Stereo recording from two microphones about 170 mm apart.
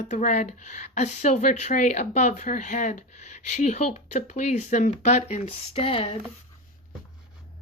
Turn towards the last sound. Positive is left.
turn(degrees=35)  # may be behind; listen again after turning